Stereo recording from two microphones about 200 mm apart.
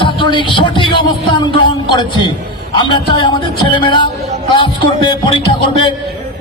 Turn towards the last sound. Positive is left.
turn(degrees=25)  # may be behind; listen again after turning